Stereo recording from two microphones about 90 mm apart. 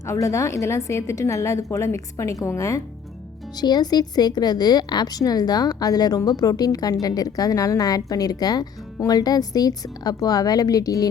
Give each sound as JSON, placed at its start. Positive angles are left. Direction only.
{"t": 0.0, "sound": "a woman's voice", "side_deg": 35}
{"t": 3.5, "sound": "a woman's voice", "side_deg": 50}